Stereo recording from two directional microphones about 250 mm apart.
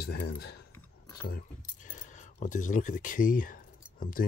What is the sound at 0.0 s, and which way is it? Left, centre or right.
Speech, left.